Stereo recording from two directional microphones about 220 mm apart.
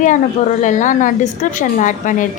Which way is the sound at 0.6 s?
35° left (ahead or behind).